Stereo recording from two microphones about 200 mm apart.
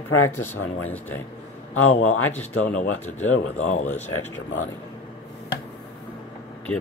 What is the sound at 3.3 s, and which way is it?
Speech, 90° left.